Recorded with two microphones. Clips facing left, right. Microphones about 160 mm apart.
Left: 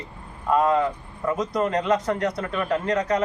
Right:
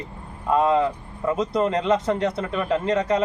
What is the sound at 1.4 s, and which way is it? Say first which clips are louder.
Speech: right 2 dB; 25° right (ahead or behind).